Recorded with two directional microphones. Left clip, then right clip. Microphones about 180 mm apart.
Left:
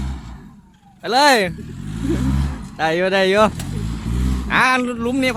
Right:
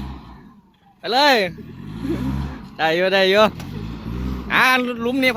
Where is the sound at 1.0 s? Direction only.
15° left (ahead or behind).